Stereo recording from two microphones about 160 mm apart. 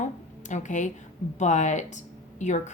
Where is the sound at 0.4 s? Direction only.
50° left (ahead or behind).